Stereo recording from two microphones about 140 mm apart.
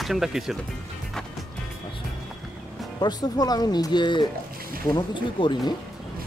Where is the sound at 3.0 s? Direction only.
30° left (ahead or behind).